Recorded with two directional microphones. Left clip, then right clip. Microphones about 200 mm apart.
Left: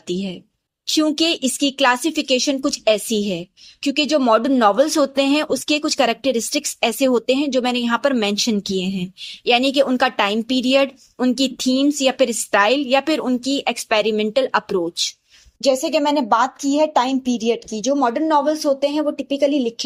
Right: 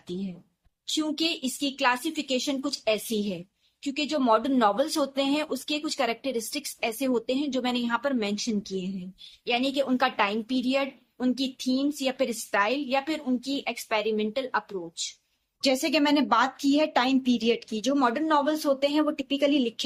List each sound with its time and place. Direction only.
0.9 s a woman's voice: 35° left (ahead or behind)
15.6 s a woman's voice: 10° left (ahead or behind)